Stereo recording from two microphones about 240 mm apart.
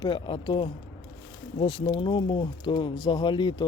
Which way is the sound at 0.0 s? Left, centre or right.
Centre.